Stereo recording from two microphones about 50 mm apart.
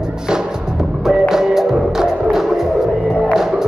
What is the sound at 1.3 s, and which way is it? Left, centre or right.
Music, centre.